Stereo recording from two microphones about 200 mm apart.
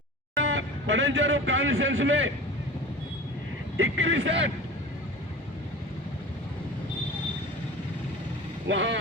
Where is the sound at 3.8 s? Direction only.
80° right.